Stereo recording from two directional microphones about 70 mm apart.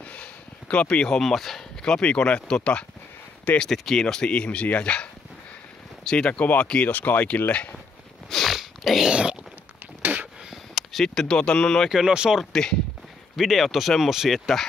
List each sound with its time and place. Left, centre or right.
0.0 s speech: centre
6.0 s speech: centre
8.3 s a sound: centre
9.1 s speech: centre
10.5 s speech: centre
11.9 s speech: centre
12.6 s speech: centre